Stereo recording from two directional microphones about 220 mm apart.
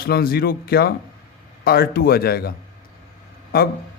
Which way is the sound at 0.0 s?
45° left (ahead or behind).